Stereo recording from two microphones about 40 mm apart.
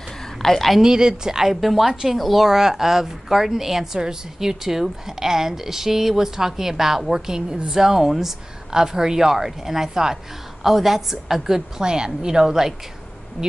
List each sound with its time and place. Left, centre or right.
0.4 s a woman's voice: centre
0.7 s a woman's voice: centre
7.5 s a woman's voice: right
7.8 s a woman's voice: centre
11.8 s a woman's voice: right